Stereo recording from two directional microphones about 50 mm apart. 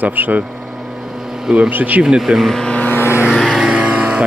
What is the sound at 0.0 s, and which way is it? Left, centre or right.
Speech, right.